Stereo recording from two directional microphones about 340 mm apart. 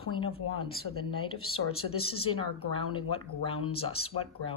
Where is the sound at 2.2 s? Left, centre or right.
Centre.